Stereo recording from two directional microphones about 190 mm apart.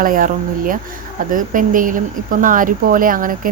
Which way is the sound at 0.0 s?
45° right (ahead or behind).